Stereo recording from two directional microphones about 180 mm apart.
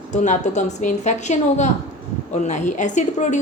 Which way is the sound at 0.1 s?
40° left (ahead or behind).